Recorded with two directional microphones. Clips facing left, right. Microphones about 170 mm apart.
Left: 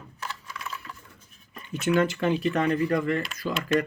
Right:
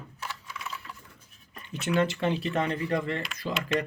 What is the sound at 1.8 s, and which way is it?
Speech, 30° right (ahead or behind).